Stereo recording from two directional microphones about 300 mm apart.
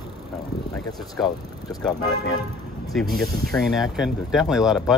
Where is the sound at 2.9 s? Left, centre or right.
Centre.